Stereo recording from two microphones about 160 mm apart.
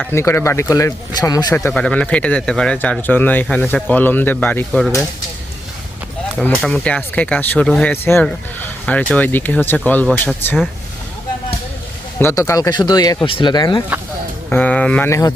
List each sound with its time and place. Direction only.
0.1 s speech: 15° left (ahead or behind)
1.5 s speech: 10° left (ahead or behind)
6.4 s speech: 5° left (ahead or behind)
12.2 s speech: 20° left (ahead or behind)
14.5 s speech: 10° left (ahead or behind)